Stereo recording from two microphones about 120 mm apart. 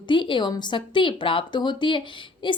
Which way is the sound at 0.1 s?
45° left (ahead or behind).